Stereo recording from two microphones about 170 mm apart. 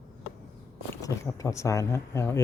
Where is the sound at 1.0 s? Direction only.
20° left (ahead or behind).